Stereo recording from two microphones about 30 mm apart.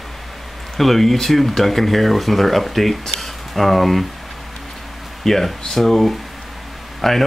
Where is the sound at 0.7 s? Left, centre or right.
Centre.